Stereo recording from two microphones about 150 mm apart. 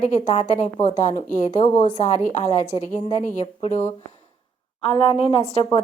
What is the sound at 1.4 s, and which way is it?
A woman's voice, 40° left (ahead or behind).